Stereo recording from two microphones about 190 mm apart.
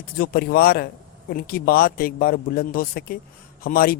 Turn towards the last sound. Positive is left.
turn(degrees=50)  # may be behind; listen again after turning